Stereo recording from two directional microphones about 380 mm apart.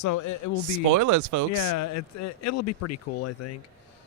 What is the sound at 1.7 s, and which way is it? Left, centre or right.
Speech, left.